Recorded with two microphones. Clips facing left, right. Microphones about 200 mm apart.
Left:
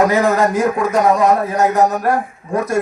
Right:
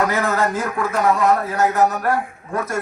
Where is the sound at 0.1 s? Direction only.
15° left (ahead or behind).